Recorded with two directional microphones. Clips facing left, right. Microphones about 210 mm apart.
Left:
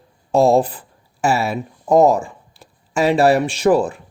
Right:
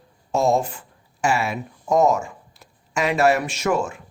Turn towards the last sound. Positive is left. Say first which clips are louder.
# left 7 dB
turn(degrees=35)  # may be behind; listen again after turning